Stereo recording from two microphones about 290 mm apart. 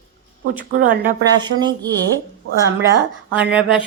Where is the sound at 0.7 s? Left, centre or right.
Right.